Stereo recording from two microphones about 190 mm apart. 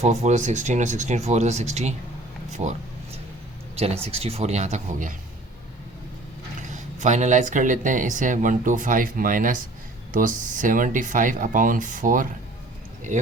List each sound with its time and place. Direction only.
0.0 s speech: 35° right (ahead or behind)
2.5 s a sound: 35° right (ahead or behind)
3.8 s speech: 30° right (ahead or behind)
6.6 s speech: 40° right (ahead or behind)